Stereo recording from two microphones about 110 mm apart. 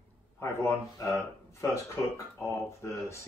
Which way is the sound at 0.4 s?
25° left (ahead or behind).